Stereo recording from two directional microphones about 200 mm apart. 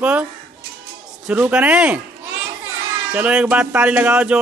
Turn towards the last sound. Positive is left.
turn(degrees=-5)  # may be behind; listen again after turning